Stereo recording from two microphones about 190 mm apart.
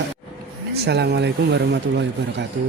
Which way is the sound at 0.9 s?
60° right (ahead or behind).